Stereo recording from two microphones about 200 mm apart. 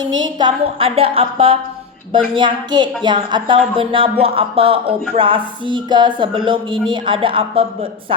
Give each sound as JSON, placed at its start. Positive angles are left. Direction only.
{"t": 0.2, "sound": "a woman's voice", "side_deg": -25}